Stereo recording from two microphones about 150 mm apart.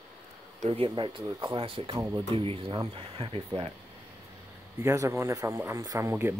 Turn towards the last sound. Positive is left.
turn(degrees=-15)  # may be behind; listen again after turning